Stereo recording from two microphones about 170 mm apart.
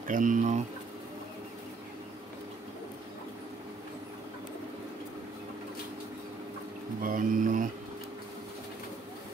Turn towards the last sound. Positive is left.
turn(degrees=-50)  # may be behind; listen again after turning